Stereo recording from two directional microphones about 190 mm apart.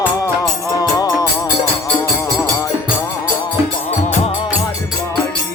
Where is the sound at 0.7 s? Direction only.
20° left (ahead or behind).